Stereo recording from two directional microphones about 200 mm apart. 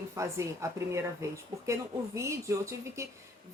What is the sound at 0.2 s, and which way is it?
Speech, 15° right (ahead or behind).